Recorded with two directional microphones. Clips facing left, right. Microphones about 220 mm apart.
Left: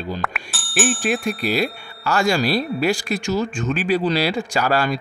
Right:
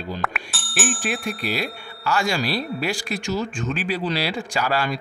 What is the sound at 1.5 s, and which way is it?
Speech, 45° left (ahead or behind).